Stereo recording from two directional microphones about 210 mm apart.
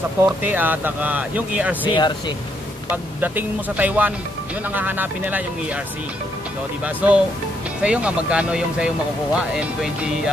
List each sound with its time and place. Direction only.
0.4 s speech: 10° right (ahead or behind)
1.9 s speech: 20° left (ahead or behind)
3.2 s speech: 10° right (ahead or behind)
6.8 s speech: 5° right (ahead or behind)